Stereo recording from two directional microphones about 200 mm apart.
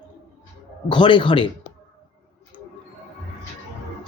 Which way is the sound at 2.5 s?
25° left (ahead or behind).